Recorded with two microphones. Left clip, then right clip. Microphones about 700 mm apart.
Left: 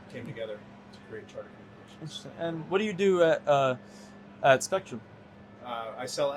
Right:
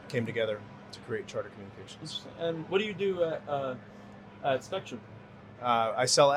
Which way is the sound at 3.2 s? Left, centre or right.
Left.